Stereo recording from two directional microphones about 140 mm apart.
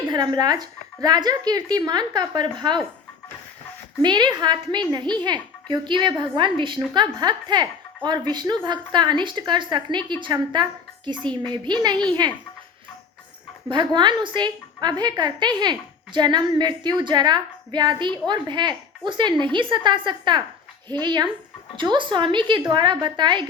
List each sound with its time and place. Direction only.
0.1 s speech: 30° right (ahead or behind)
4.0 s a woman's voice: 30° right (ahead or behind)
13.7 s a woman's voice: 35° right (ahead or behind)